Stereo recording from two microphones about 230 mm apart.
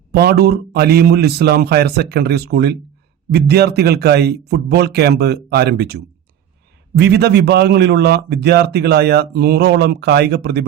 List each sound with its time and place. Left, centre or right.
0.1 s speech: right